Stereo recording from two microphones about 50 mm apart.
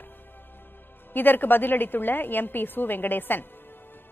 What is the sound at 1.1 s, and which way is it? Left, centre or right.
A woman's voice, left.